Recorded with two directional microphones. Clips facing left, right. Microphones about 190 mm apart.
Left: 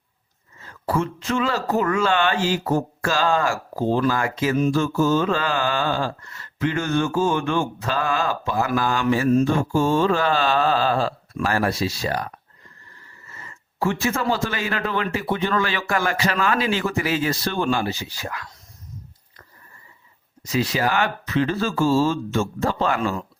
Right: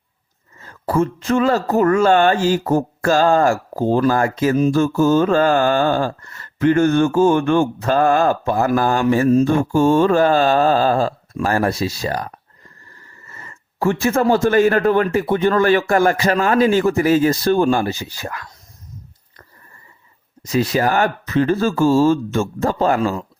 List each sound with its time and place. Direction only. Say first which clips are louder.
0.6 s speech: right 5 dB; 45° right (ahead or behind)
20.4 s speech: right 5 dB; 50° right (ahead or behind)